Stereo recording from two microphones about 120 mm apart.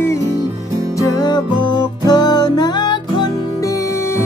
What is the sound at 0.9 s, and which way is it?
Music, 30° left (ahead or behind).